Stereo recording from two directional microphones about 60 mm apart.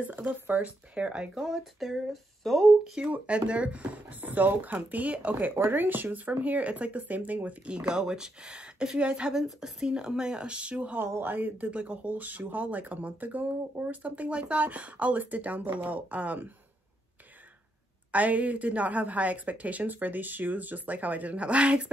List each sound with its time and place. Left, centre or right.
0.0 s speech: right
1.4 s speech: centre
3.1 s speech: centre
11.1 s speech: right
18.1 s speech: right